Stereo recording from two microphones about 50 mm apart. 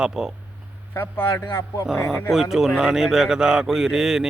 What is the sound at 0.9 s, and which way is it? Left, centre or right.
A man's voice, left.